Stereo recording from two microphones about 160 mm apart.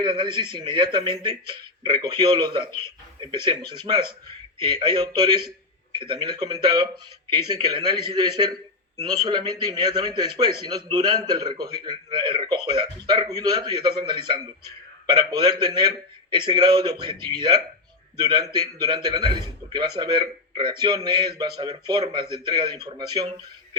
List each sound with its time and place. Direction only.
0.0 s a man's voice: 30° right (ahead or behind)